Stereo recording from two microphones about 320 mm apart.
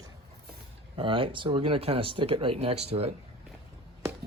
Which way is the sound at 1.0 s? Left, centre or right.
Centre.